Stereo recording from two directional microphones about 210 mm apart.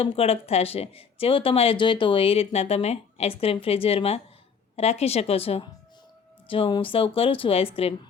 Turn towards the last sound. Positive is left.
turn(degrees=25)  # may be behind; listen again after turning